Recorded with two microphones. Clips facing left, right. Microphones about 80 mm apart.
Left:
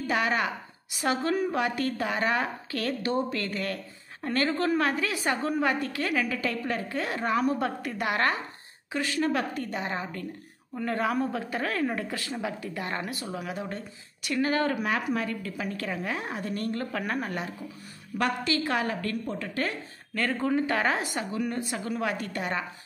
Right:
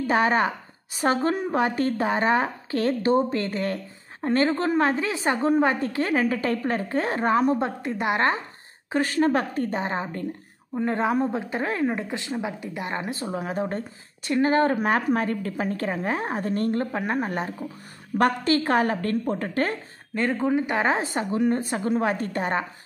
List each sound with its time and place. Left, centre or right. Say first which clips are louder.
0.1 s a woman's voice: right 5 dB; right
8.9 s a woman's voice: right 6 dB; right
20.2 s a woman's voice: right 3 dB; centre; by 22.7 s right